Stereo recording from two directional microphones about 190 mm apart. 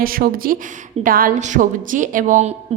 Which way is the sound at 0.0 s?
50° right (ahead or behind).